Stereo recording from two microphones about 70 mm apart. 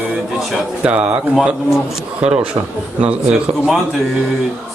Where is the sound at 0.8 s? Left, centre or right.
Centre.